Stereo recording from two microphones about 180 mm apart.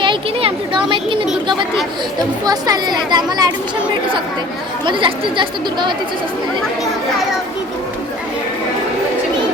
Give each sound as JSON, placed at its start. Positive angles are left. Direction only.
{"t": 0.0, "sound": "a sound", "side_deg": -30}
{"t": 2.4, "sound": "speech", "side_deg": -20}
{"t": 4.9, "sound": "speech", "side_deg": -25}